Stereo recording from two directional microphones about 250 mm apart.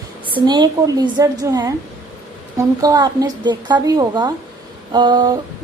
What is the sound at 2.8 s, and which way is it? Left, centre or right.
A woman's voice, centre.